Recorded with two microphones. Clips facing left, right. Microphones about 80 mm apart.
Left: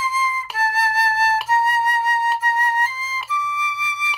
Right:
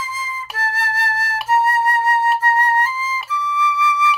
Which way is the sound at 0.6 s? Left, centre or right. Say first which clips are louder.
Right 1 dB; right.